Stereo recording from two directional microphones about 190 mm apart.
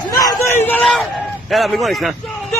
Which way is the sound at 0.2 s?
15° left (ahead or behind).